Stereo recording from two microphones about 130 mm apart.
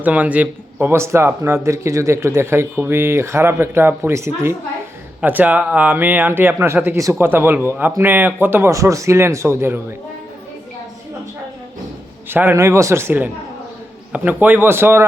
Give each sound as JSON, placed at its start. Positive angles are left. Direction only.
{"t": 0.0, "sound": "speech", "side_deg": -10}
{"t": 12.3, "sound": "speech", "side_deg": -15}